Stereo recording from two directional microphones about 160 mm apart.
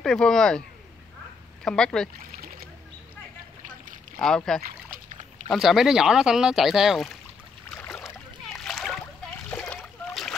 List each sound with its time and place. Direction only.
0.0 s speech: 5° left (ahead or behind)
2.1 s rowboat: 65° right (ahead or behind)
4.2 s speech: 5° left (ahead or behind)
4.6 s a sound: 50° right (ahead or behind)
5.5 s speech: centre (ahead or behind)
7.7 s boat: 10° left (ahead or behind)
8.5 s splash: 5° left (ahead or behind)